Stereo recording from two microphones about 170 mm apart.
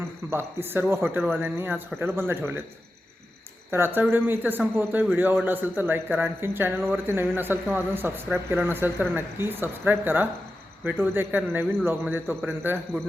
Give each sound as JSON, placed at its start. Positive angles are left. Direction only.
{"t": 0.3, "sound": "a man's voice", "side_deg": -15}
{"t": 3.7, "sound": "a man's voice", "side_deg": -15}